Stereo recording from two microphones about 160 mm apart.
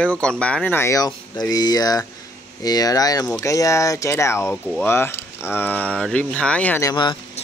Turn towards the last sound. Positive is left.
turn(degrees=25)  # may be behind; listen again after turning